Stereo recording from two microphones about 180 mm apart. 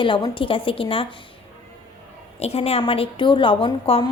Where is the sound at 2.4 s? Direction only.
35° left (ahead or behind).